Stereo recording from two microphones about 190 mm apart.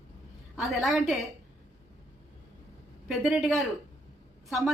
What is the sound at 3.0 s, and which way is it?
Speech, 5° right (ahead or behind).